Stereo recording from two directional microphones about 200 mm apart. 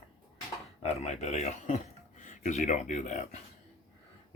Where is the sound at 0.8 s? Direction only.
30° left (ahead or behind).